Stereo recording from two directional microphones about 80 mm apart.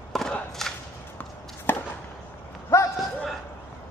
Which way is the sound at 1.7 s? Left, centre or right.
Left.